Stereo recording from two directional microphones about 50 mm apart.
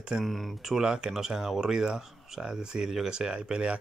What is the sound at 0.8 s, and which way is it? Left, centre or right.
Speech, centre.